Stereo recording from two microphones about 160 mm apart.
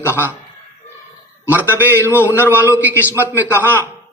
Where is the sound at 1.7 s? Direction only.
10° right (ahead or behind).